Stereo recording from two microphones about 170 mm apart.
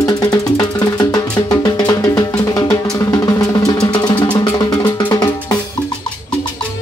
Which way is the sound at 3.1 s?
20° left (ahead or behind).